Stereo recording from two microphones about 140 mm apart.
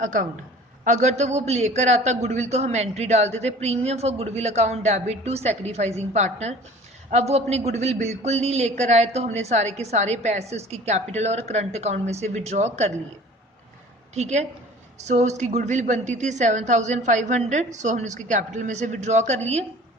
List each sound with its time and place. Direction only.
0.0 s a woman's voice: 65° right (ahead or behind)
14.1 s a man's voice: 55° right (ahead or behind)